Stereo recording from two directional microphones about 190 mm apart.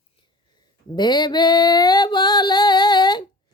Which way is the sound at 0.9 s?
20° left (ahead or behind).